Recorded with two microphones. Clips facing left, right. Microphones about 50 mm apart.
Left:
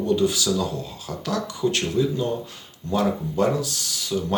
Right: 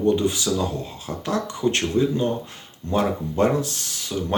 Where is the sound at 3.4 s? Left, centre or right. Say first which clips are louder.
Right 2 dB; right.